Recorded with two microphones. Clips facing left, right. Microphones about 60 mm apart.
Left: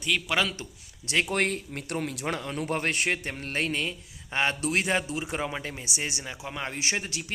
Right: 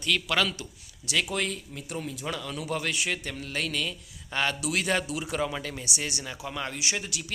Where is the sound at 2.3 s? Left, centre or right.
Left.